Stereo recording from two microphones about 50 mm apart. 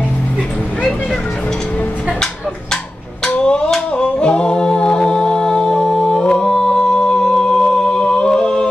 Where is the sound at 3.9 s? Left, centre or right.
Left.